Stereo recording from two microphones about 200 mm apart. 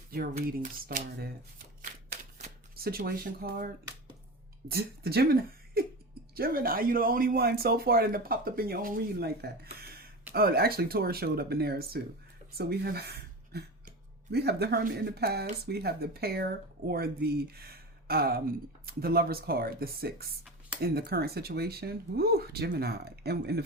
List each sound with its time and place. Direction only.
0.4 s speech: 45° right (ahead or behind)
4.7 s speech: 50° right (ahead or behind)